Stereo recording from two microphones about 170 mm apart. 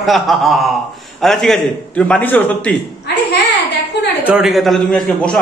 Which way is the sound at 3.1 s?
80° left.